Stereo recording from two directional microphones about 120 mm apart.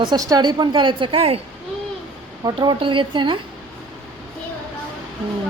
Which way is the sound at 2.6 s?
45° right (ahead or behind).